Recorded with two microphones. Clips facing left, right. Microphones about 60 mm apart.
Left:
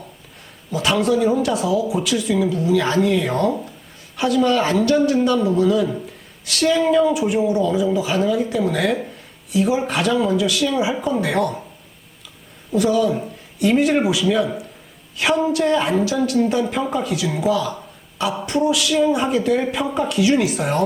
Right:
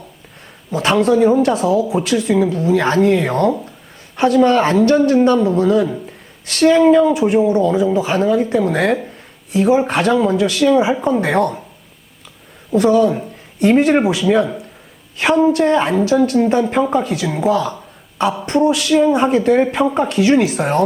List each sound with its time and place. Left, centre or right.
0.7 s a woman's voice: right
12.7 s speech: right